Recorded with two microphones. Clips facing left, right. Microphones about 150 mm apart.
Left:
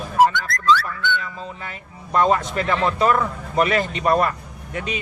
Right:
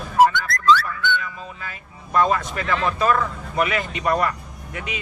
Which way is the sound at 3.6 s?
35° left (ahead or behind).